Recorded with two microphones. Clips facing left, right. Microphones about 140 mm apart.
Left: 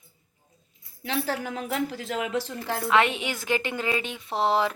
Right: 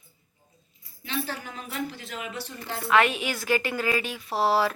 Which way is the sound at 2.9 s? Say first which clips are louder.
Right 1 dB; 25° left (ahead or behind).